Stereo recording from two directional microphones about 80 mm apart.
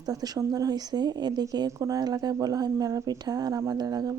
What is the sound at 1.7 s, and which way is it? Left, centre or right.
Speech, right.